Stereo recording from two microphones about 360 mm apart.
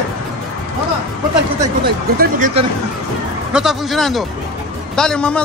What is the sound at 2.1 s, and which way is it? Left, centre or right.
Speech, right.